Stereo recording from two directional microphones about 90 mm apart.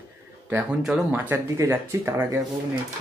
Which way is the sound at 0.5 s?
10° right (ahead or behind).